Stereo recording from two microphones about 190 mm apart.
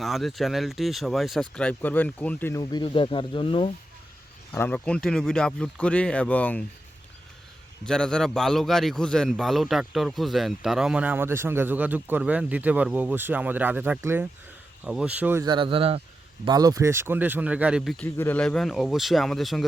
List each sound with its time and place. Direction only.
0.0 s speech: centre (ahead or behind); by 3.7 s 30° left (ahead or behind)
4.5 s a man's voice: 10° left (ahead or behind)
7.9 s a man's voice: 5° left (ahead or behind)
15.4 s a man's voice: 25° right (ahead or behind); by 19.6 s centre (ahead or behind)